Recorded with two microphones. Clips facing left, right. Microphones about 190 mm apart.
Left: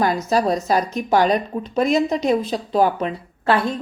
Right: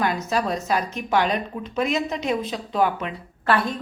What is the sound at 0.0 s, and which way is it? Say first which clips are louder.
Speech: left 5 dB; 35° left (ahead or behind).